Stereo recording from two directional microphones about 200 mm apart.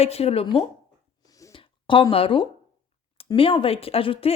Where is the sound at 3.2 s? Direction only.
25° left (ahead or behind).